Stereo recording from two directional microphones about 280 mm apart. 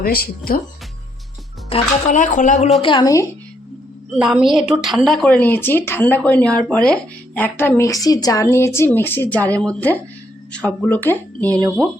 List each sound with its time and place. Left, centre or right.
0.0 s speech: left
1.7 s speech: left
2.8 s speech: centre
4.2 s a woman's voice: centre
11.4 s speech: centre